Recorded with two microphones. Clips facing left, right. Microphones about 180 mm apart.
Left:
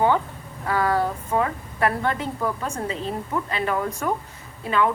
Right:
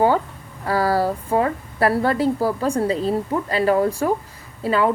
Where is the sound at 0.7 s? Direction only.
35° right (ahead or behind).